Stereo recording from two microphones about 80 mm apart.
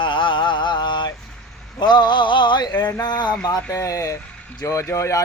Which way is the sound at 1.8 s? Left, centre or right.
Left.